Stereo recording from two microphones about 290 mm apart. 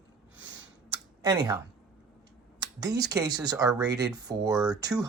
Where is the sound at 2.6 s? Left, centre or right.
Centre.